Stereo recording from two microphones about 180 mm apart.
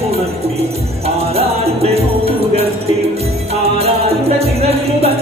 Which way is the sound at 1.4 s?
35° right (ahead or behind).